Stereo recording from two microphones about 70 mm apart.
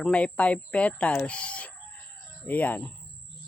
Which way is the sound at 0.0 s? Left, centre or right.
Centre.